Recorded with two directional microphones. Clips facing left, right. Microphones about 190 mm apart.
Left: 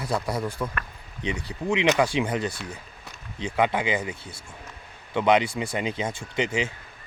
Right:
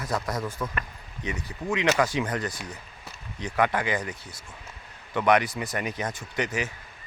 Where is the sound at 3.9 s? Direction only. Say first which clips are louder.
Left 2 dB; 10° left (ahead or behind).